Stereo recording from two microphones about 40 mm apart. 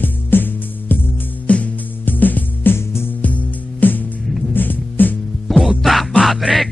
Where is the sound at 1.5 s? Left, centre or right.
Left.